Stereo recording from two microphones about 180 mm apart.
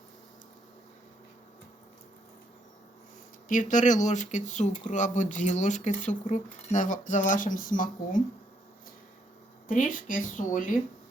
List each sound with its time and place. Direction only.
3.5 s speech: 45° left (ahead or behind)
9.6 s speech: 50° left (ahead or behind)